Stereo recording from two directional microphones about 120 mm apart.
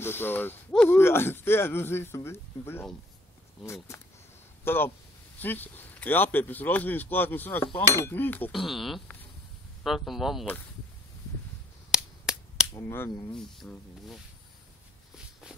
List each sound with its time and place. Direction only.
0.0 s speech: 20° left (ahead or behind)
8.5 s speech: centre (ahead or behind)
11.9 s finger snapping: 5° right (ahead or behind)
12.7 s speech: 20° left (ahead or behind)
13.6 s speech: centre (ahead or behind)